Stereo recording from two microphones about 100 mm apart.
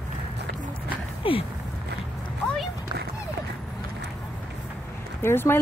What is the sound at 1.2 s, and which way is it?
Speech, 60° left (ahead or behind).